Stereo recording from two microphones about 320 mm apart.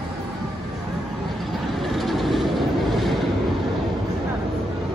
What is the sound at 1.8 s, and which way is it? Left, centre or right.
Vehicle, centre.